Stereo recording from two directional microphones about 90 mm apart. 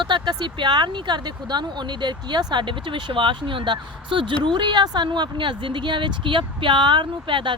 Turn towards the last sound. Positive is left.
turn(degrees=-65)  # may be behind; listen again after turning